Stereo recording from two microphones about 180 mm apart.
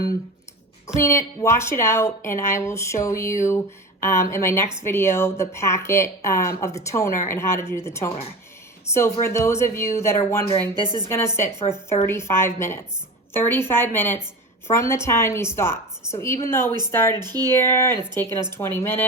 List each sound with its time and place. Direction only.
0.9 s a woman's voice: 15° left (ahead or behind)
17.2 s speech: 20° right (ahead or behind)
17.4 s a woman's voice: 15° left (ahead or behind)